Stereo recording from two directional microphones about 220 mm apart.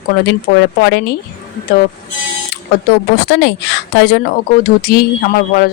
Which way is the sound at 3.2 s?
50° left (ahead or behind).